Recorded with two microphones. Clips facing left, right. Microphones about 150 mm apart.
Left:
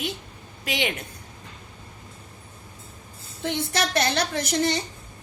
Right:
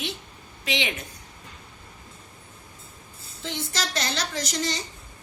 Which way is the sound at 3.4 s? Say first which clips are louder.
Left 6 dB; 60° left (ahead or behind).